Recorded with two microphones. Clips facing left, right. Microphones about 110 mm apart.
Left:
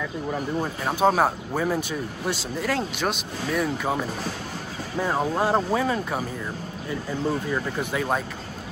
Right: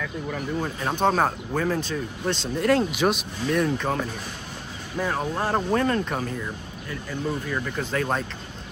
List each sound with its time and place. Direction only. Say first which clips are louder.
0.0 s speech: left 2 dB; 10° left (ahead or behind)
5.0 s speech: left 3 dB; 15° left (ahead or behind)
7.5 s speech: left 1 dB; 15° left (ahead or behind)